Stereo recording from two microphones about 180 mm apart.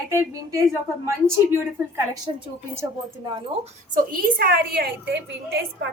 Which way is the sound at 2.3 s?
30° right (ahead or behind).